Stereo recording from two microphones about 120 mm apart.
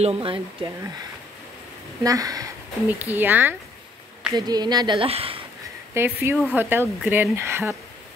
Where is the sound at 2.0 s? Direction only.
30° right (ahead or behind).